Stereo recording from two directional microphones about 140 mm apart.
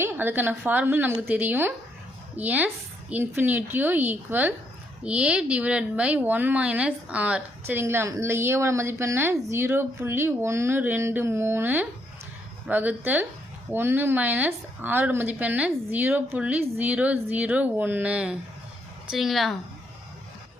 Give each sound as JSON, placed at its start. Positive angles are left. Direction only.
{"t": 0.0, "sound": "a woman's voice", "side_deg": -15}